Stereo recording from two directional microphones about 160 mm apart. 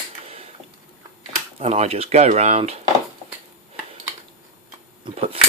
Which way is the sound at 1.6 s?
40° right (ahead or behind).